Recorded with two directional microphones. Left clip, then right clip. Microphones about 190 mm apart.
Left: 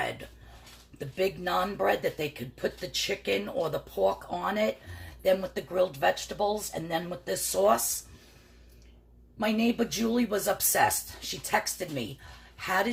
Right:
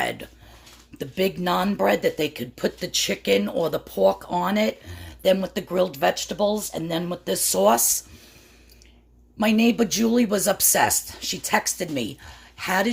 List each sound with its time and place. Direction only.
0.9 s speech: 60° right (ahead or behind)
9.4 s speech: 60° right (ahead or behind)